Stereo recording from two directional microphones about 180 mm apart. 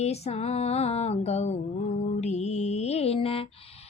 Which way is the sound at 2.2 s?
40° left (ahead or behind).